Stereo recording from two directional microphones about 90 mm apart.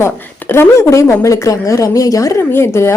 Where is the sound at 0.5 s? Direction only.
30° left (ahead or behind).